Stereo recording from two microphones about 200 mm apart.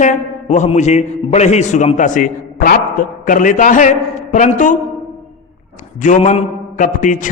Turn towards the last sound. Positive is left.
turn(degrees=40)  # may be behind; listen again after turning